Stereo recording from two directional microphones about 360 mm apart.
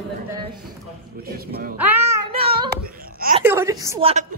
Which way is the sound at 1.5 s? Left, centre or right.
Right.